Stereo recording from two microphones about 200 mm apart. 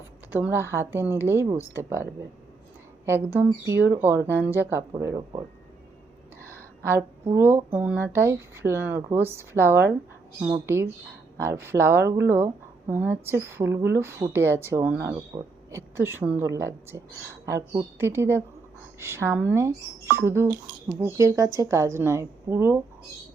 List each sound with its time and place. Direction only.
0.3 s speech: 10° right (ahead or behind)
3.1 s speech: 10° right (ahead or behind)
6.6 s speech: 10° right (ahead or behind)
11.3 s speech: 10° right (ahead or behind)
15.3 s speech: 30° right (ahead or behind)
15.7 s speech: 10° right (ahead or behind)